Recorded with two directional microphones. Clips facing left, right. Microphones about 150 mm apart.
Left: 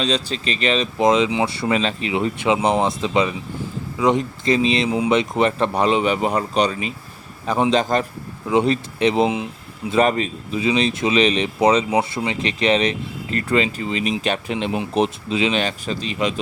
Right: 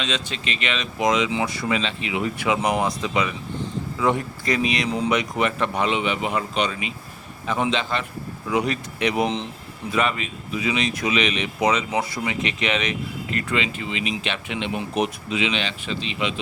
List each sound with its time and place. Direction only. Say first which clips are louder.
0.0 s speech: left 6 dB; 35° left (ahead or behind)
1.7 s speech: left 4 dB; 40° left (ahead or behind)
8.4 s speech: left 6 dB; 30° left (ahead or behind)
9.9 s speech: left 6 dB; 35° left (ahead or behind)